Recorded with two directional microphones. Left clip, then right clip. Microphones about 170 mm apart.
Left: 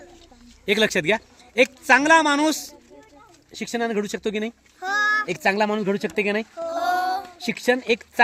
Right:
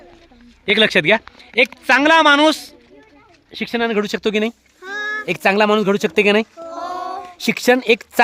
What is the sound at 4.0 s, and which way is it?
Speech, 45° right (ahead or behind).